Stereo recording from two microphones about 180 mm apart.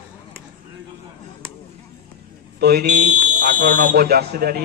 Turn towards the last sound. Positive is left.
turn(degrees=-60)  # may be behind; listen again after turning